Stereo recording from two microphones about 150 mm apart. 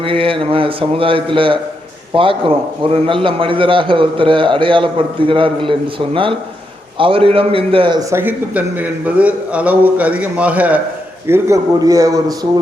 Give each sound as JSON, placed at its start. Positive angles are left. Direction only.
{"t": 0.0, "sound": "a man's voice", "side_deg": -35}
{"t": 7.0, "sound": "a man's voice", "side_deg": -35}
{"t": 7.9, "sound": "a man's voice", "side_deg": -15}